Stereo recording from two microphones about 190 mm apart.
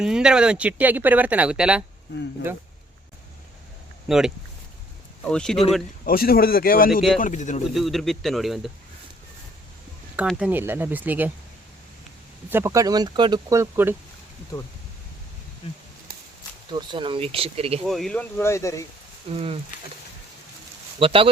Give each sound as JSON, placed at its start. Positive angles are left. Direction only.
{"t": 0.0, "sound": "speech", "side_deg": -5}
{"t": 4.1, "sound": "speech", "side_deg": 0}
{"t": 5.3, "sound": "speech", "side_deg": 5}
{"t": 6.1, "sound": "speech", "side_deg": 50}
{"t": 7.7, "sound": "speech", "side_deg": 0}
{"t": 10.2, "sound": "speech", "side_deg": -5}
{"t": 12.5, "sound": "speech", "side_deg": -15}
{"t": 16.6, "sound": "speech", "side_deg": -25}
{"t": 17.8, "sound": "speech", "side_deg": 0}
{"t": 19.3, "sound": "speech", "side_deg": -30}
{"t": 21.0, "sound": "speech", "side_deg": -30}